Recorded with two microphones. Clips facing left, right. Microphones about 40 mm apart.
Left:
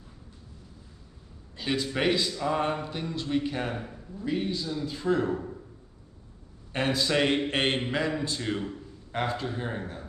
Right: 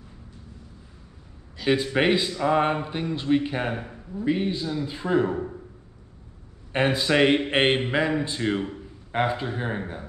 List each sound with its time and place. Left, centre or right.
1.7 s a man's voice: right
6.7 s a man's voice: right